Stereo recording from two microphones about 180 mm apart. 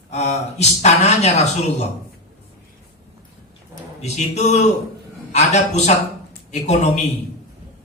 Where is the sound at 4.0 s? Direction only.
40° left (ahead or behind).